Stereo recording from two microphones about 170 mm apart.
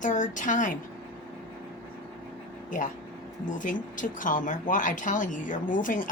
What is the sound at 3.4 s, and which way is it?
Speech, 50° left (ahead or behind).